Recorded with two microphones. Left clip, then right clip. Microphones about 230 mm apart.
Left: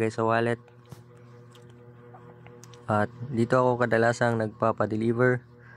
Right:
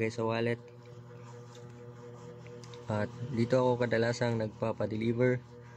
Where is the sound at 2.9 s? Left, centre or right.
Centre.